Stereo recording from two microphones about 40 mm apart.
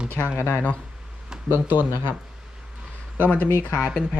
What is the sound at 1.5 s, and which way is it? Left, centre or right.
Speech, right.